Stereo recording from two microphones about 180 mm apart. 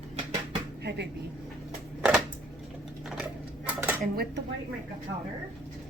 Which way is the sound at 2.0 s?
5° right (ahead or behind).